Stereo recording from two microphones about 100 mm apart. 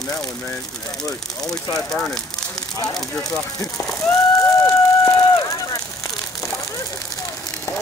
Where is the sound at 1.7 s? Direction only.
5° left (ahead or behind).